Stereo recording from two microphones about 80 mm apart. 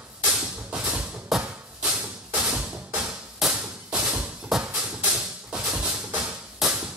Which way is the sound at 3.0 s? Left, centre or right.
Centre.